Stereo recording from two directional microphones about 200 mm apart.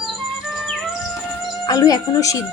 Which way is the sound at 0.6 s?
Centre (ahead or behind).